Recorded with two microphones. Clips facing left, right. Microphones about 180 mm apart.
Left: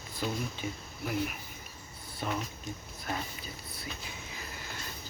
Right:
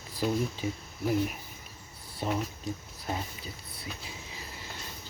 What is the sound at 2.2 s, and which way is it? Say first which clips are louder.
Speech: right 4 dB; 30° right (ahead or behind).